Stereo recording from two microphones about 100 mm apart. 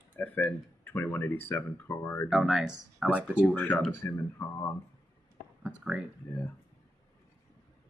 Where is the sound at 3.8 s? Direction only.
30° left (ahead or behind).